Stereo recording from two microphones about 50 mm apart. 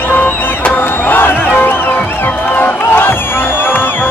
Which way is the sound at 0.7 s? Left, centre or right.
Left.